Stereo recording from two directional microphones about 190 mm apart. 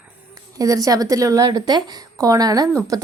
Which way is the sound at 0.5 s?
20° right (ahead or behind).